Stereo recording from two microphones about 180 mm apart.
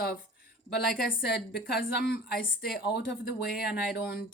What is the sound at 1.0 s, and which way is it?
Speech, 65° left (ahead or behind).